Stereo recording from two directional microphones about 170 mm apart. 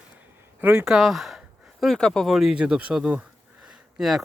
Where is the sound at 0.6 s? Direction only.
10° right (ahead or behind).